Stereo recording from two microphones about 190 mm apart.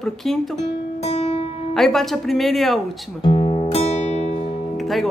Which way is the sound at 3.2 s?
30° left (ahead or behind).